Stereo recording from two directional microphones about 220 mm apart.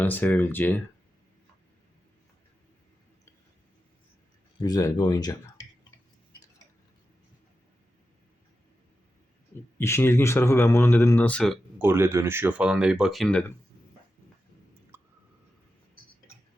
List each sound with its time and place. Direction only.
0.0 s speech: 10° left (ahead or behind)
4.6 s speech: 15° left (ahead or behind)
9.7 s speech: 10° left (ahead or behind)
11.8 s speech: 10° right (ahead or behind)
14.9 s a sound: 10° right (ahead or behind)